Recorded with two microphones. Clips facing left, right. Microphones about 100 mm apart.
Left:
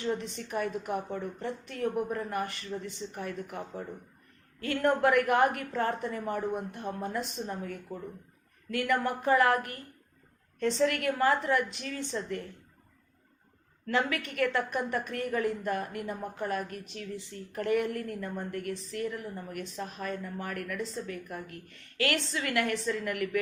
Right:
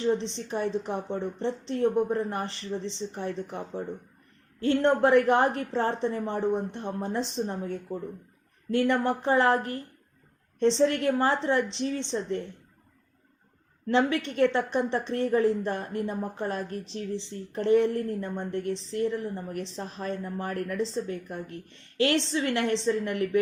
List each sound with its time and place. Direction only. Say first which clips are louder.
0.0 s a woman's voice: right 6 dB; 25° right (ahead or behind)
13.8 s a woman's voice: right 5 dB; 25° right (ahead or behind)